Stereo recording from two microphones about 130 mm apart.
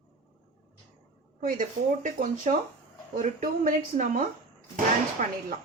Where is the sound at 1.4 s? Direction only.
90° right; by 2.6 s 75° right (ahead or behind).